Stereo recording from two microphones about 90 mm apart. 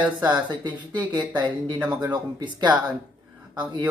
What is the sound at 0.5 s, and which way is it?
Speech, 55° right (ahead or behind).